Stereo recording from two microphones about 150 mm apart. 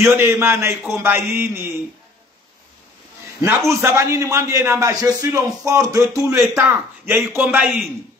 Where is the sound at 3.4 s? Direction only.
15° right (ahead or behind).